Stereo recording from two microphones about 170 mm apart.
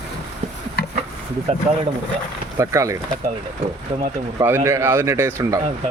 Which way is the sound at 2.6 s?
20° right (ahead or behind).